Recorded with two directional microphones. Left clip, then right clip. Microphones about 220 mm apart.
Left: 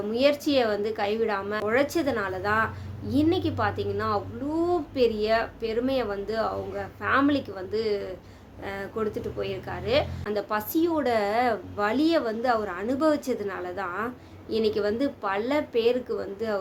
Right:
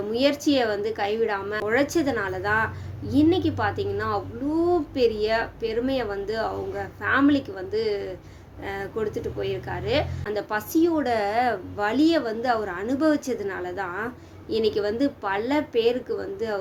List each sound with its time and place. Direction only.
0.1 s a woman's voice: 5° left (ahead or behind)